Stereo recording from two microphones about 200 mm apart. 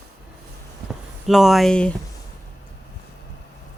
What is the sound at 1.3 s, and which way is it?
Speech, centre (ahead or behind).